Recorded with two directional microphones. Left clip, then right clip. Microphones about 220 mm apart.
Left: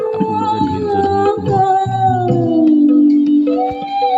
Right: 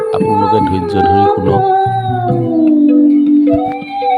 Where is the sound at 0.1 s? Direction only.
30° right (ahead or behind).